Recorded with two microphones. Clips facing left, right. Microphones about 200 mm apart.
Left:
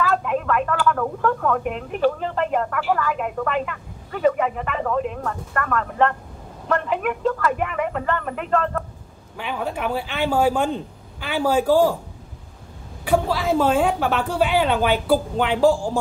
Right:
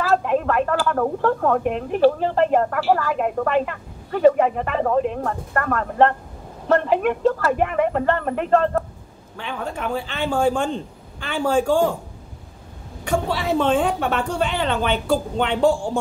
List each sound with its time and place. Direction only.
0.1 s speech: 35° right (ahead or behind)
9.4 s a man's voice: 10° left (ahead or behind)
13.0 s a woman's voice: centre (ahead or behind)